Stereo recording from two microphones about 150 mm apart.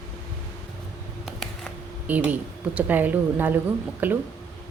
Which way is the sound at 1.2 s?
Centre (ahead or behind).